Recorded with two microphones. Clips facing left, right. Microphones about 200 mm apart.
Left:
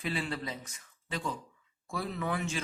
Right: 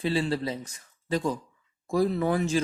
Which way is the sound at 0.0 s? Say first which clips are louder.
Right 8 dB; 30° right (ahead or behind).